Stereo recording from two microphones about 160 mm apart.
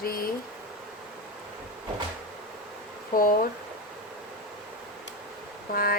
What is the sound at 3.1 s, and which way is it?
Speech, 60° left (ahead or behind).